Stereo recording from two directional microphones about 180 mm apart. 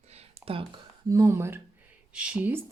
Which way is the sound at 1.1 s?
15° right (ahead or behind).